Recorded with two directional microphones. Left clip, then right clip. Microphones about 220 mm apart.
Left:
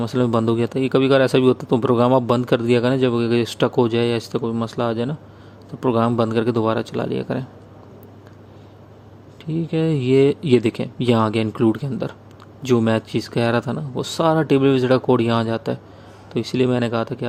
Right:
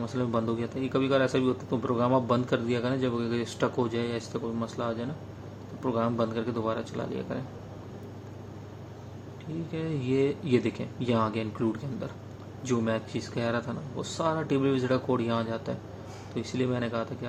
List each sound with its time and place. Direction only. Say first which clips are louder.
0.0 s speech: left 10 dB; 45° left (ahead or behind)
9.7 s speech: left 12 dB; 50° left (ahead or behind)